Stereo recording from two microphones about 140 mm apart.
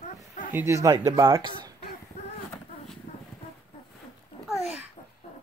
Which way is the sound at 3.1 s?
50° left (ahead or behind).